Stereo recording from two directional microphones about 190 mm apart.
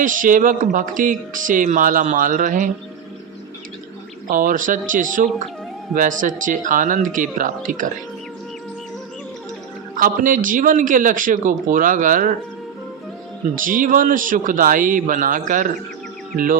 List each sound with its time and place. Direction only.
0.0 s speech: 45° right (ahead or behind)
4.3 s speech: 45° right (ahead or behind)
10.0 s speech: 45° right (ahead or behind)
13.6 s speech: 45° right (ahead or behind)